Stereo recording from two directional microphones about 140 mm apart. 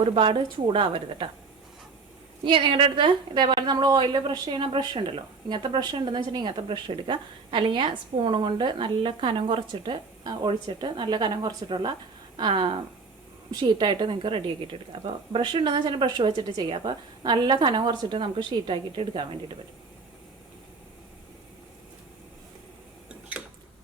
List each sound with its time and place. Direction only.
0.1 s a woman's voice: 35° right (ahead or behind)
2.4 s a woman's voice: 35° right (ahead or behind)